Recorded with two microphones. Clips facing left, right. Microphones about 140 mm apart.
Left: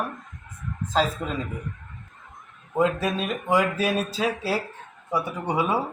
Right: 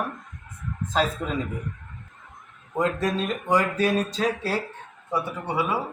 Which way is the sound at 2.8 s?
10° left (ahead or behind).